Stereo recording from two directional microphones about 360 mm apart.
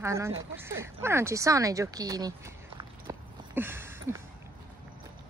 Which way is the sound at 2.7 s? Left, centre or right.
Centre.